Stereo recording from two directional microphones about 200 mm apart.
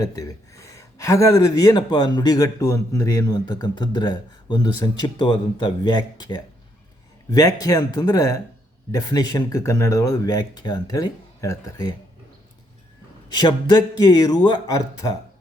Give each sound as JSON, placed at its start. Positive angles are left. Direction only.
{"t": 0.0, "sound": "speech", "side_deg": 15}
{"t": 13.3, "sound": "speech", "side_deg": 20}